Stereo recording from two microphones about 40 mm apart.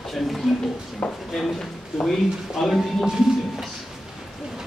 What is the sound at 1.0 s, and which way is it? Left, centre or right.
Speech, left.